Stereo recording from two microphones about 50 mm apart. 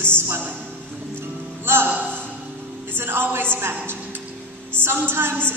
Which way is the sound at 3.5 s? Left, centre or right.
Right.